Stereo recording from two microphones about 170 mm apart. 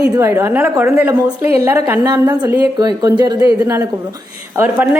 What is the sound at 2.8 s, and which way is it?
A woman's voice, 25° right (ahead or behind).